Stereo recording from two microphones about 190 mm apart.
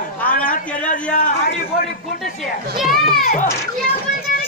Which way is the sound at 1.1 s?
50° left (ahead or behind).